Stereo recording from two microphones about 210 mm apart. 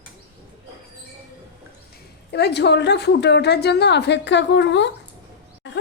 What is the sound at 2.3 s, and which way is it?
A woman's voice, 50° left (ahead or behind).